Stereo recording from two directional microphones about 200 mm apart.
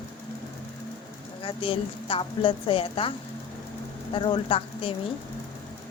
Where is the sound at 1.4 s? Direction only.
25° left (ahead or behind).